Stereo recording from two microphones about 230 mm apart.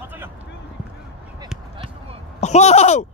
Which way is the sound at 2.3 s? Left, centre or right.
Left.